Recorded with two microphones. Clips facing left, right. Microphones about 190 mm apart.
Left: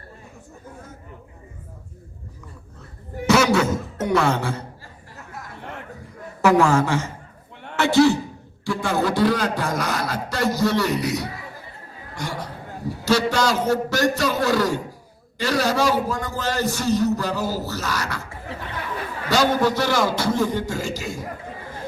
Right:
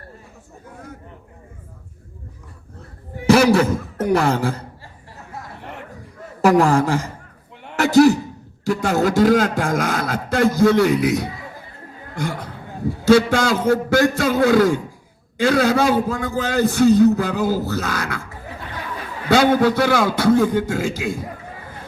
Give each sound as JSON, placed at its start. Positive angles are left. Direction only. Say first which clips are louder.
{"t": 3.2, "sound": "speech", "louder": "right 4 dB", "side_deg": -35}
{"t": 6.4, "sound": "a man's voice", "louder": "right 2 dB", "side_deg": -35}
{"t": 7.8, "sound": "a sound", "louder": "right 4 dB", "side_deg": -40}
{"t": 8.6, "sound": "a man's voice", "louder": "right 4 dB", "side_deg": -45}
{"t": 19.3, "sound": "a man's voice", "louder": "right 5 dB", "side_deg": -55}